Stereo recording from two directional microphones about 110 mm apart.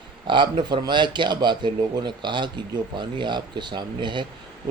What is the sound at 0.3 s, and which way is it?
Speech, 45° right (ahead or behind).